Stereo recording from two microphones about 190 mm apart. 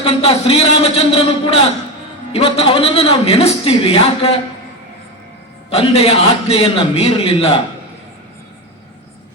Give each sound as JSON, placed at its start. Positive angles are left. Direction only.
{"t": 0.0, "sound": "a man's voice", "side_deg": 30}
{"t": 5.7, "sound": "a man's voice", "side_deg": 30}